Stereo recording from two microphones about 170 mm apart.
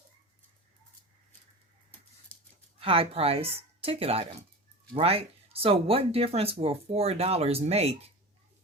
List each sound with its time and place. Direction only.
2.8 s speech: 35° right (ahead or behind)